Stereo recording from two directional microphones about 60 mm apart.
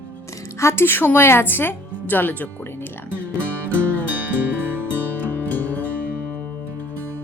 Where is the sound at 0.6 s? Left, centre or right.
Left.